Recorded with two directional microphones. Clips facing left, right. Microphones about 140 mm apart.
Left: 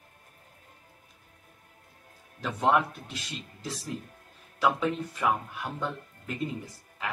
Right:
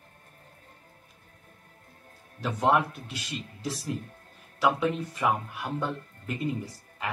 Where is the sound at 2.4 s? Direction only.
Centre (ahead or behind).